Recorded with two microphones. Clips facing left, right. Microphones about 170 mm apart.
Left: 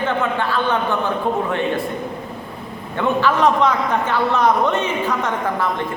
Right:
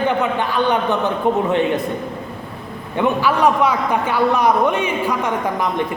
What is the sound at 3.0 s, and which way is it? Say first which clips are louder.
A man's voice: right 1 dB; 10° right (ahead or behind).